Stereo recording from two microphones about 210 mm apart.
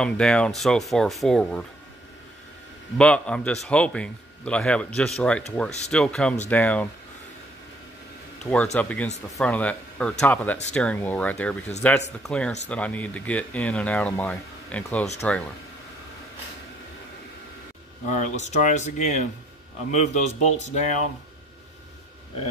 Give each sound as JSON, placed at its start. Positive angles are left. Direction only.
{"t": 0.0, "sound": "a man's voice", "side_deg": 5}
{"t": 3.0, "sound": "a man's voice", "side_deg": 5}
{"t": 8.7, "sound": "a man's voice", "side_deg": 5}
{"t": 18.0, "sound": "speech", "side_deg": 35}